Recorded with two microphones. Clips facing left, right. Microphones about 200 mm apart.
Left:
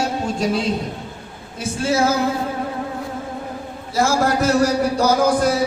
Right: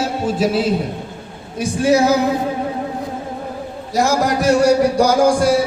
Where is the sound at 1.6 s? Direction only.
15° right (ahead or behind).